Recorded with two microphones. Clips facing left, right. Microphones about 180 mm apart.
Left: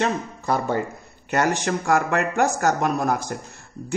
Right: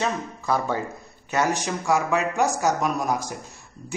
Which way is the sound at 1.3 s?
60° left (ahead or behind).